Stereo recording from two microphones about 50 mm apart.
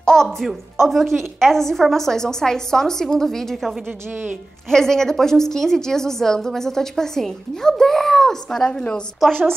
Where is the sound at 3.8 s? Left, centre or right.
Right.